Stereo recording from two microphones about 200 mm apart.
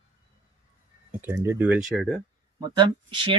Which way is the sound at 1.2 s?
15° right (ahead or behind).